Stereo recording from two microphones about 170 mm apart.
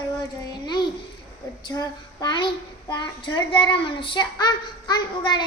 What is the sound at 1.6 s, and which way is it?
A child's voice, 25° left (ahead or behind).